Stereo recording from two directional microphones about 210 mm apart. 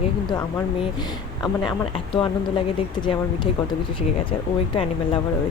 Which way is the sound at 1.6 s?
20° left (ahead or behind).